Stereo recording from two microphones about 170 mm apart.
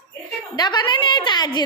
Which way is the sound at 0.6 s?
25° left (ahead or behind).